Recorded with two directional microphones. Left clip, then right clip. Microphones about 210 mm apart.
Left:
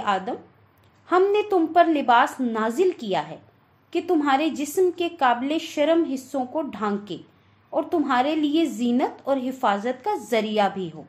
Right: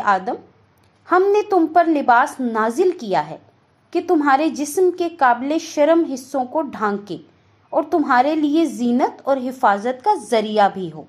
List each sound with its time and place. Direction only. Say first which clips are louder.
0.0 s a woman's voice: right 6 dB; 25° right (ahead or behind)